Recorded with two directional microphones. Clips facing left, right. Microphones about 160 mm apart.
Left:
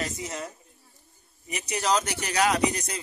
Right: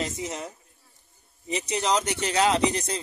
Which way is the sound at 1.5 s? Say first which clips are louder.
Right 1 dB; 20° right (ahead or behind).